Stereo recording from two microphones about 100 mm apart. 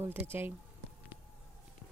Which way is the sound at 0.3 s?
20° right (ahead or behind).